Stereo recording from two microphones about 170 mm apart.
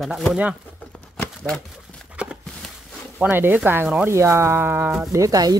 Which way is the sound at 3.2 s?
10° right (ahead or behind).